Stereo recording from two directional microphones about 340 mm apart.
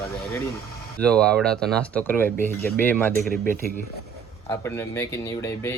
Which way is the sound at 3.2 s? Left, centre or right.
Right.